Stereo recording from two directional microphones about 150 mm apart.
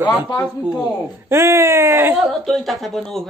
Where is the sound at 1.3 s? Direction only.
20° right (ahead or behind).